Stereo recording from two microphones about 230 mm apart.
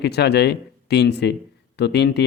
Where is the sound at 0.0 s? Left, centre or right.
Left.